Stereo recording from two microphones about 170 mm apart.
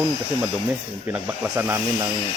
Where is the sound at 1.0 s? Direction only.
10° right (ahead or behind).